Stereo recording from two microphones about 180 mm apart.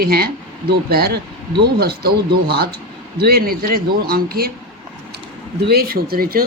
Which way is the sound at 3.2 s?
60° right (ahead or behind).